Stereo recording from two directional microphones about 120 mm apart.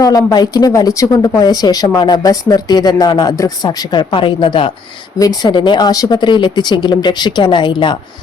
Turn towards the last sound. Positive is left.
turn(degrees=40)  # may be behind; listen again after turning